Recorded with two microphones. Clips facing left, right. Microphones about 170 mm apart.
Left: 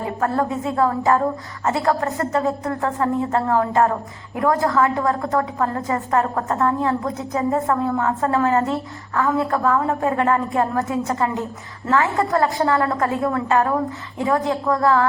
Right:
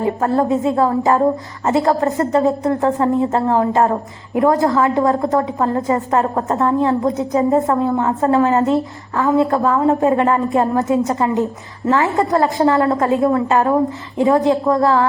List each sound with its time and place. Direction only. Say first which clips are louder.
0.2 s a woman's voice: right 2 dB; 25° right (ahead or behind)